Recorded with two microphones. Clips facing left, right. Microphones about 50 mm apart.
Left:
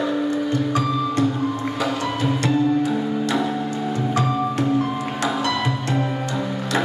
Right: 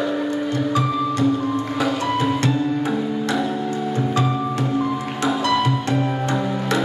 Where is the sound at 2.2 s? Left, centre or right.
Right.